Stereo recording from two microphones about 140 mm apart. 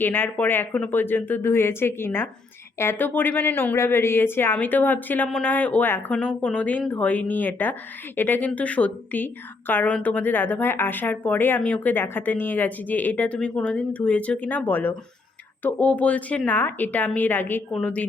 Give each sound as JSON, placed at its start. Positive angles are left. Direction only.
{"t": 0.0, "sound": "speech", "side_deg": 15}